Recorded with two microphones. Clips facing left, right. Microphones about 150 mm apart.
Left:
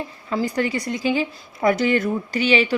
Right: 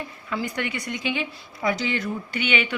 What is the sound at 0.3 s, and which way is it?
Speech, 35° left (ahead or behind).